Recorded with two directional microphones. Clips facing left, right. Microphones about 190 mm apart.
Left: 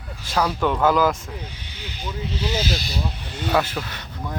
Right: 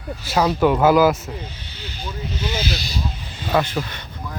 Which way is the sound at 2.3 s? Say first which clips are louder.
Left 1 dB; 35° left (ahead or behind).